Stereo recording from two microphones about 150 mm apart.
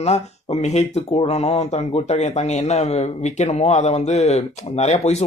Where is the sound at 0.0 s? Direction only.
45° left (ahead or behind).